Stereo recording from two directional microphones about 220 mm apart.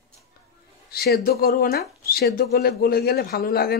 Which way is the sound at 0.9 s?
45° left (ahead or behind).